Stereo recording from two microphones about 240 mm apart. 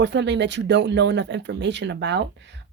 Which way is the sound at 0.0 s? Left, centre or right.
Right.